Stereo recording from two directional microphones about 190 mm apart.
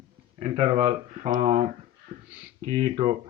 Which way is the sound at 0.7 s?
40° right (ahead or behind).